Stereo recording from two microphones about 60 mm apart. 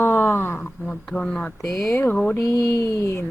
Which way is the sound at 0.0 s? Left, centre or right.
Left.